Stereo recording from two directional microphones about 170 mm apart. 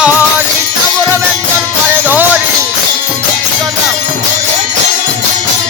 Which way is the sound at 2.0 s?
10° right (ahead or behind).